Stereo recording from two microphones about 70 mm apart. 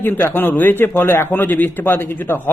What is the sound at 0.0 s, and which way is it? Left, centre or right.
A man's voice, left.